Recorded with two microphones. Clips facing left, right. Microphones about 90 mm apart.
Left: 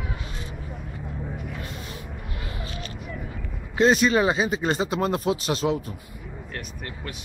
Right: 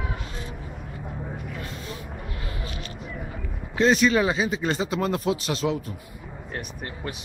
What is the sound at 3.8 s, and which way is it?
Speech, 10° left (ahead or behind).